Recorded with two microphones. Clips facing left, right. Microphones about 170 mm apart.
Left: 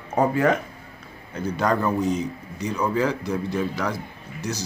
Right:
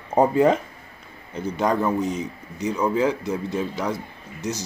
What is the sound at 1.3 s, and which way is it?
A man's voice, 20° right (ahead or behind).